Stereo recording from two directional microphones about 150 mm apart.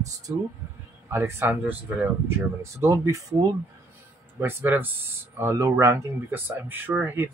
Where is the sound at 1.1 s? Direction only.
15° right (ahead or behind).